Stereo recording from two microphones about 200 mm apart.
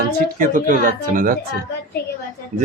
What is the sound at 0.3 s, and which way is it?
Speech, 45° right (ahead or behind).